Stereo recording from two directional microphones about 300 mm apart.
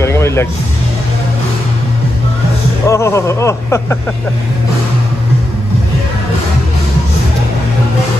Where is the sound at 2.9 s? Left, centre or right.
Centre.